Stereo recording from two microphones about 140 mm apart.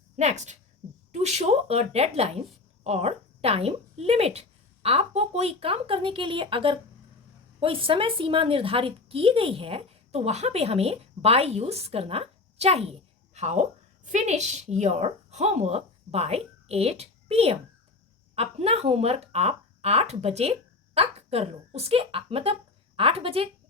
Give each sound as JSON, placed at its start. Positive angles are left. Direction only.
{"t": 0.2, "sound": "a woman's voice", "side_deg": -55}